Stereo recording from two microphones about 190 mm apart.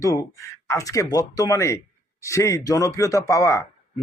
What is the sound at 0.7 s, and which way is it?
Speech, 15° left (ahead or behind).